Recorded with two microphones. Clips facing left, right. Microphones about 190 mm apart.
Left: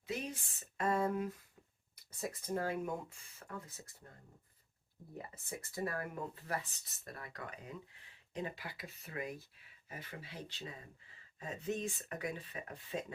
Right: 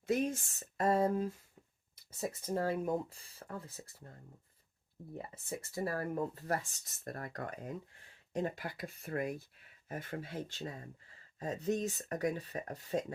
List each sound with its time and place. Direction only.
0.0 s speech: 50° right (ahead or behind); by 3.7 s 30° right (ahead or behind)
5.1 s speech: 30° right (ahead or behind)